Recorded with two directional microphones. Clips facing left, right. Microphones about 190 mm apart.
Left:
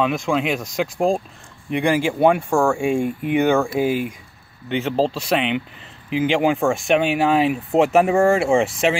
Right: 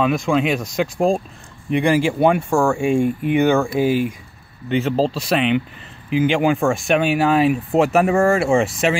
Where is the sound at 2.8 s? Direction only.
15° left (ahead or behind).